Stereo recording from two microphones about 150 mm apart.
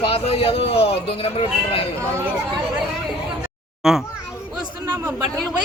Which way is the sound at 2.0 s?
20° right (ahead or behind).